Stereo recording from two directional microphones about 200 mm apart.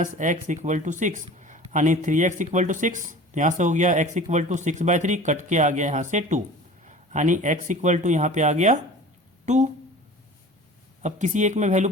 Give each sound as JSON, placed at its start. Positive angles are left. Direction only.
{"t": 0.0, "sound": "speech", "side_deg": -40}
{"t": 11.0, "sound": "speech", "side_deg": -35}